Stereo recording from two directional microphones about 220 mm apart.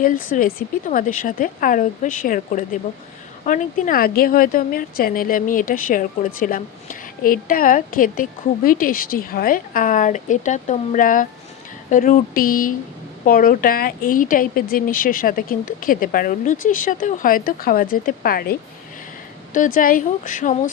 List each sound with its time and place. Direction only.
0.0 s a woman's voice: 40° left (ahead or behind)
19.5 s a woman's voice: 40° left (ahead or behind)